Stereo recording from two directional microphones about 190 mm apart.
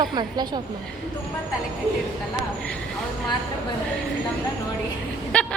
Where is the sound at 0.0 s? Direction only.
20° right (ahead or behind).